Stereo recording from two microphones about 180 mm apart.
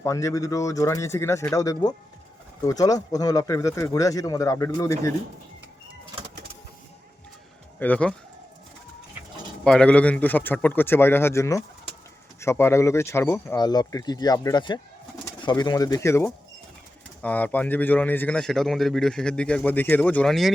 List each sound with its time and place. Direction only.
0.0 s a man's voice: 15° left (ahead or behind)
7.8 s a man's voice: 10° left (ahead or behind)
9.6 s a man's voice: 5° left (ahead or behind)